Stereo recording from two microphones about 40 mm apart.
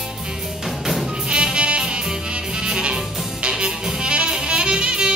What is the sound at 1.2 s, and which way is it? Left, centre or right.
Music, right.